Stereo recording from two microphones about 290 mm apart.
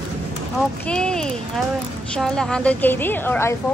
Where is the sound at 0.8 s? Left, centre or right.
Centre.